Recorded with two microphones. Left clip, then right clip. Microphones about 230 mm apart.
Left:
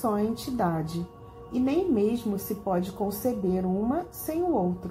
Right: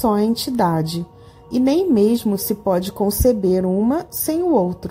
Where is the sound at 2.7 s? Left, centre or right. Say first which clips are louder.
Right 9 dB; right.